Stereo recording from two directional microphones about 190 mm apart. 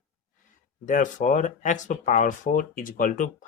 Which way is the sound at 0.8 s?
40° left (ahead or behind).